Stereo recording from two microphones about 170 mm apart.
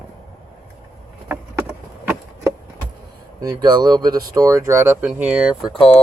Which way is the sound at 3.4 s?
25° right (ahead or behind).